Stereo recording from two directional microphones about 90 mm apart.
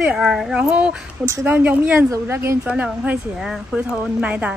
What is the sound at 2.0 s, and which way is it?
Speech, 30° right (ahead or behind).